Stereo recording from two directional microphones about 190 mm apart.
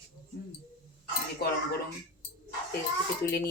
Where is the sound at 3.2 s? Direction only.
55° left (ahead or behind).